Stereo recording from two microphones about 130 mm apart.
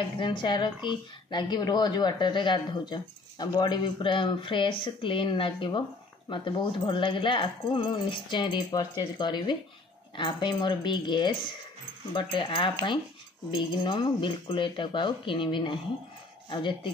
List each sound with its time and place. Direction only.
0.2 s a woman's voice: 35° left (ahead or behind)